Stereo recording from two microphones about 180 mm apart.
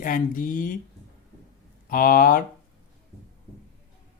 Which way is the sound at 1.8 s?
50° left (ahead or behind).